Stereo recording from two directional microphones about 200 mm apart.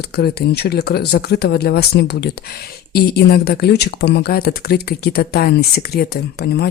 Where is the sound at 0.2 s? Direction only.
50° left (ahead or behind).